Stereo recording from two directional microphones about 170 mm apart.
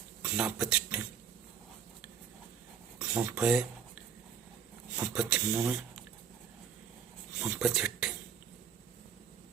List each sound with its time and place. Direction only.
0.2 s speech: 5° right (ahead or behind)
3.0 s a sound: 5° right (ahead or behind)
4.9 s speech: 5° right (ahead or behind)
7.3 s speech: 5° right (ahead or behind)